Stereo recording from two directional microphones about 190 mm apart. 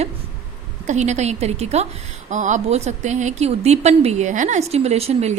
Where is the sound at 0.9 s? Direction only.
35° right (ahead or behind).